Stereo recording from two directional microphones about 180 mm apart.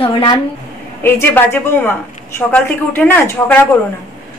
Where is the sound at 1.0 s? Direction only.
10° left (ahead or behind).